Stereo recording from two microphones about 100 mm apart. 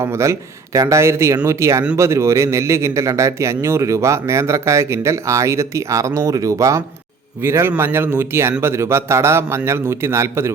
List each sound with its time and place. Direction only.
0.0 s a man's voice: 30° right (ahead or behind)